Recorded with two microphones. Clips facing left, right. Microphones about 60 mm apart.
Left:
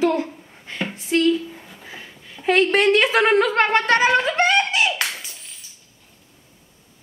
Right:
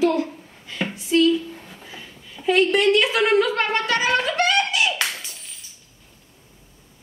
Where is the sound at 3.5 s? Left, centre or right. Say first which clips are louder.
Left 5 dB; left.